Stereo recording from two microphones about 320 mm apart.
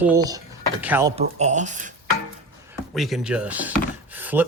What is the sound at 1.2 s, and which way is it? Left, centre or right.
Speech, right.